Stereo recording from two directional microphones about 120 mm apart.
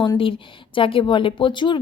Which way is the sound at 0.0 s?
45° left (ahead or behind).